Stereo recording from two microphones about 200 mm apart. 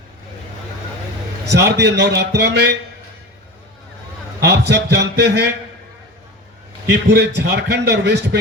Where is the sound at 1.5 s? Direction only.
55° right (ahead or behind).